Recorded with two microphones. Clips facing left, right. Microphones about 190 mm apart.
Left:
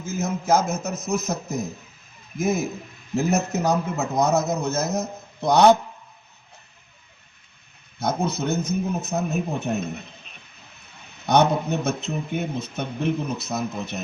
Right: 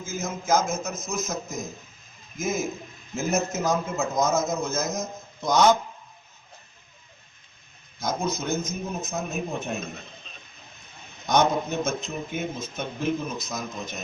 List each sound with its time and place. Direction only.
0.1 s a man's voice: 65° left (ahead or behind)
7.9 s a man's voice: 65° left (ahead or behind)
11.3 s a man's voice: 65° left (ahead or behind)